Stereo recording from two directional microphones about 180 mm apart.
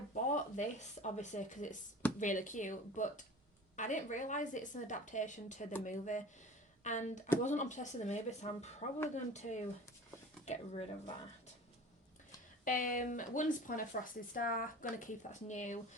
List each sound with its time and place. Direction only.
0.1 s speech: 45° left (ahead or behind)
12.6 s speech: 50° left (ahead or behind)